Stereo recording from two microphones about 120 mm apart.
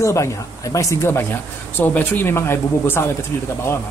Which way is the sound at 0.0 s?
25° left (ahead or behind).